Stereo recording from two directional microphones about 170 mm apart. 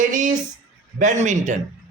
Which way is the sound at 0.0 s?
45° right (ahead or behind).